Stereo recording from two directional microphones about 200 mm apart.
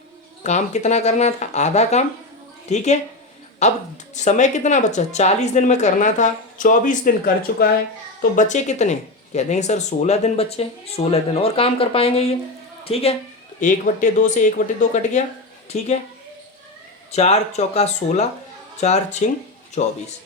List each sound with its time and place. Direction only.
0.4 s a woman's voice: 35° left (ahead or behind)
8.4 s a woman's voice: 35° left (ahead or behind)
13.6 s speech: 40° left (ahead or behind)
17.1 s speech: 30° left (ahead or behind)